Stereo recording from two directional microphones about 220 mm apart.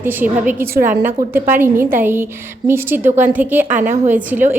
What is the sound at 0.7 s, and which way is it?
Speech, 40° right (ahead or behind).